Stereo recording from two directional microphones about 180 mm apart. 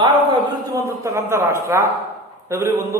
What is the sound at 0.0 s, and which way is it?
A man's voice, 20° right (ahead or behind).